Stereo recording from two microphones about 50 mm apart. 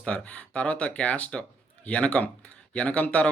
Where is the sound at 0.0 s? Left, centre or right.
Left.